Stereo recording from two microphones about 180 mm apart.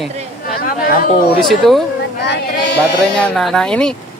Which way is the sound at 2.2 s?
70° left (ahead or behind).